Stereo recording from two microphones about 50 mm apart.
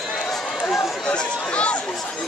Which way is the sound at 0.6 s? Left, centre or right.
Centre.